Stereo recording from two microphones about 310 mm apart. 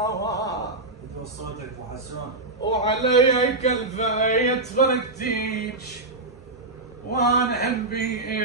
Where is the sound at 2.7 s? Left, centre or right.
Centre.